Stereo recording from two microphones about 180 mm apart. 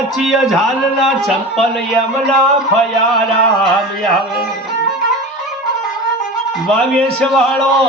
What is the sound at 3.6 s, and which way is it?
Speech, centre (ahead or behind).